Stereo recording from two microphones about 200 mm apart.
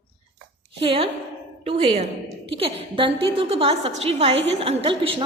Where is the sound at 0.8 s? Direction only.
25° right (ahead or behind).